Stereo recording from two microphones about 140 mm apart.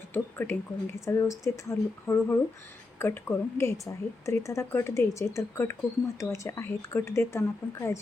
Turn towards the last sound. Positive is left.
turn(degrees=20)  # may be behind; listen again after turning